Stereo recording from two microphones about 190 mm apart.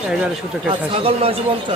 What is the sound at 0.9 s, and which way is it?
Speech, 30° right (ahead or behind).